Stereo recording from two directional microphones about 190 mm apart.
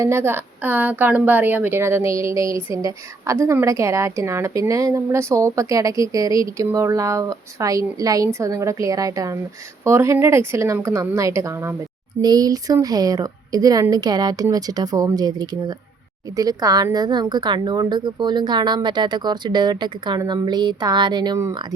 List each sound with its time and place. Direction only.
0.0 s a woman's voice: 10° right (ahead or behind)